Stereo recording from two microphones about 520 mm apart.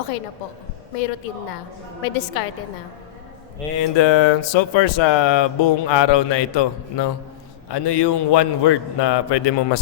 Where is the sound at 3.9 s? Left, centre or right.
Left.